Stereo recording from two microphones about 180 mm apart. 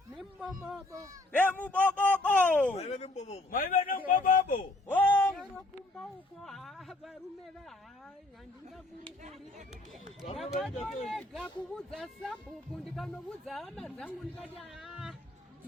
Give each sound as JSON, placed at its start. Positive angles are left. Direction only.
{"t": 0.1, "sound": "a sound", "side_deg": -5}
{"t": 1.3, "sound": "a man's voice", "side_deg": 10}
{"t": 2.7, "sound": "speech", "side_deg": 35}
{"t": 3.6, "sound": "a man's voice", "side_deg": 50}
{"t": 4.9, "sound": "a sound", "side_deg": 10}
{"t": 6.4, "sound": "speech", "side_deg": 0}
{"t": 9.0, "sound": "speech", "side_deg": -40}
{"t": 10.3, "sound": "speech", "side_deg": 0}